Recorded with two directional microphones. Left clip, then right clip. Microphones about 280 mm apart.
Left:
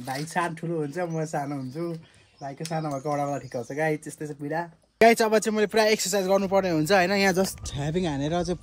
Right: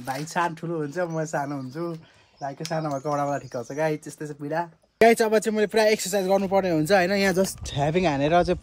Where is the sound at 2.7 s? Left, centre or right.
Centre.